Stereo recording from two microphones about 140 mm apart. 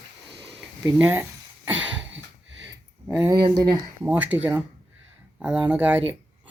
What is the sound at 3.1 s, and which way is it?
Speech, 15° right (ahead or behind).